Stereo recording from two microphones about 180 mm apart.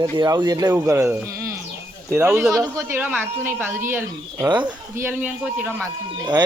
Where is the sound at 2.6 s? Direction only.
20° right (ahead or behind).